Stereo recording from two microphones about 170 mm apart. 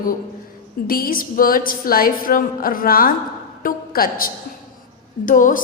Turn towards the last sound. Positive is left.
turn(degrees=50)  # may be behind; listen again after turning